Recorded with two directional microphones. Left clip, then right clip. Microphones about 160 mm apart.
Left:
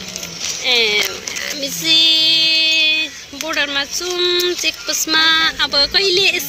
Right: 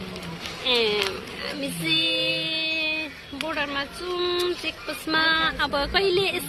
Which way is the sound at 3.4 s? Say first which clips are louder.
Left 9 dB; 10° left (ahead or behind).